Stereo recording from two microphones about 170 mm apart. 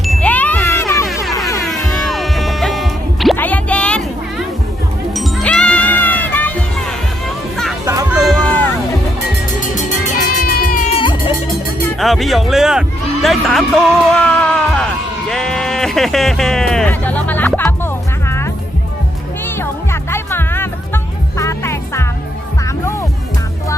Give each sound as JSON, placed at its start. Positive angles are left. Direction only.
{"t": 0.0, "sound": "ding", "side_deg": 5}
{"t": 1.5, "sound": "music", "side_deg": 0}
{"t": 8.1, "sound": "music", "side_deg": 0}
{"t": 9.6, "sound": "music", "side_deg": 50}
{"t": 10.9, "sound": "music", "side_deg": 30}
{"t": 11.9, "sound": "music", "side_deg": 0}
{"t": 13.2, "sound": "speech", "side_deg": 0}
{"t": 15.3, "sound": "music", "side_deg": 5}